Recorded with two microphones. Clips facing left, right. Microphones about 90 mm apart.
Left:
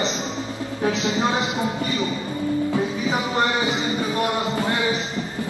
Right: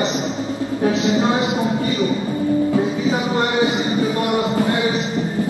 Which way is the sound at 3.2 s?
20° right (ahead or behind).